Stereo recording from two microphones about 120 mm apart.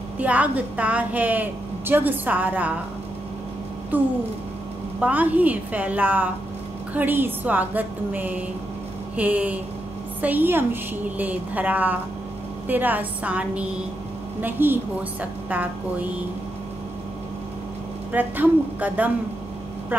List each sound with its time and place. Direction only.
0.2 s a woman's voice: 10° right (ahead or behind)
5.0 s a woman's voice: 15° right (ahead or behind)
18.1 s a woman's voice: 15° right (ahead or behind)